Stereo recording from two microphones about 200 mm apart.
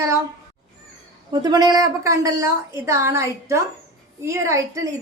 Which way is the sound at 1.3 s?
20° right (ahead or behind).